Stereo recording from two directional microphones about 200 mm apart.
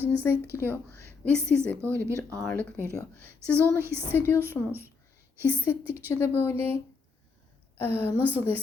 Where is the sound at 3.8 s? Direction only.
10° right (ahead or behind).